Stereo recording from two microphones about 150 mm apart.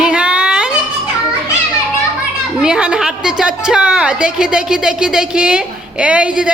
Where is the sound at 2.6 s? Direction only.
5° right (ahead or behind).